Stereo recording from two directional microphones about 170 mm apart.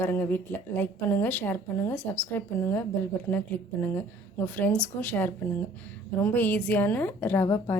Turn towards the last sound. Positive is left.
turn(degrees=15)  # may be behind; listen again after turning